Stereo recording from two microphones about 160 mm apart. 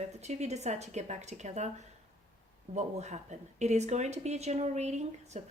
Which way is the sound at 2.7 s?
45° right (ahead or behind).